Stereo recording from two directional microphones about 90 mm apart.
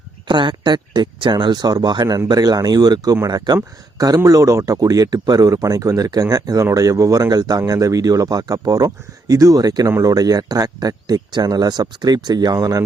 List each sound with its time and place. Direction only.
0.3 s speech: 60° right (ahead or behind); by 12.8 s 45° right (ahead or behind)